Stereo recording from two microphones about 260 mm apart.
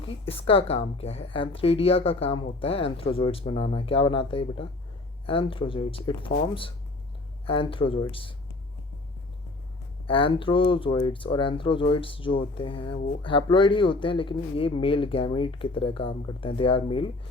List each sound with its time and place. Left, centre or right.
0.3 s speech: left
10.1 s speech: centre